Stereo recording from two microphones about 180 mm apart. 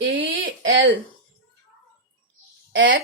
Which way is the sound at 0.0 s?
90° right.